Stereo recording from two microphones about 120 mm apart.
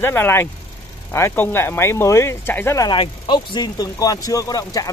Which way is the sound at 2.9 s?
40° left (ahead or behind).